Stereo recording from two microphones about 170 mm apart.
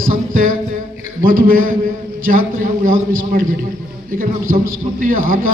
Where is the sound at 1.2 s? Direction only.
55° right (ahead or behind).